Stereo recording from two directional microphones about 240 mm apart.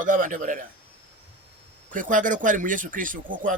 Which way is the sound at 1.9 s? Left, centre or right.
Right.